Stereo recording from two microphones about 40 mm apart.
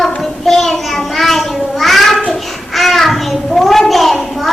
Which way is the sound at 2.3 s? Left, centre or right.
Centre.